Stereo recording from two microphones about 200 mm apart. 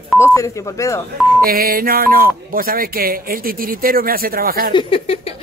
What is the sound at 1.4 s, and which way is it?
Speech, 45° right (ahead or behind).